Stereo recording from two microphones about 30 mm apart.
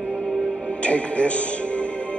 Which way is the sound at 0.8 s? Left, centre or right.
Left.